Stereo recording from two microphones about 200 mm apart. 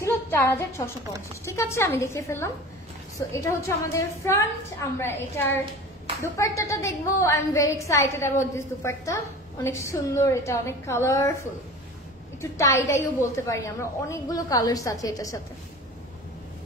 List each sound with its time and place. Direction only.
0.0 s a woman's voice: 10° left (ahead or behind)
12.4 s a woman's voice: 15° left (ahead or behind)